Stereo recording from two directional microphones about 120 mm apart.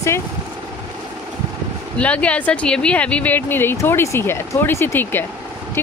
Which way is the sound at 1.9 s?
10° left (ahead or behind).